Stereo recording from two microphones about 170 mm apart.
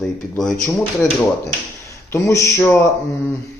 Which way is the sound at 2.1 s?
15° left (ahead or behind).